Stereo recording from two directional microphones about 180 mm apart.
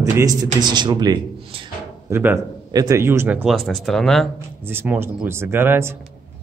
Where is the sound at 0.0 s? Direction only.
15° right (ahead or behind).